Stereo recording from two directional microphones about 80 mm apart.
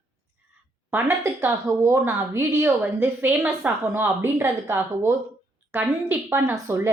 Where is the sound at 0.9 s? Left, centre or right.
Right.